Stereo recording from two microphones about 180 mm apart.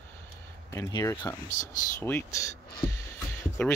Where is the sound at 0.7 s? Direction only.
20° left (ahead or behind).